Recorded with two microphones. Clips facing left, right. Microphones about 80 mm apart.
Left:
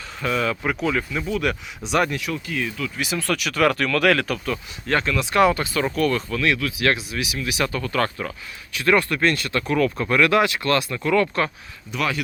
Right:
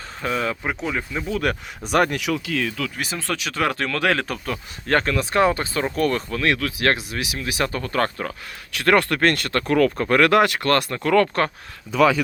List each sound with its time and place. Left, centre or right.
0.2 s speech: right
1.4 s speech: right
3.2 s speech: right
4.4 s speech: right
8.7 s speech: right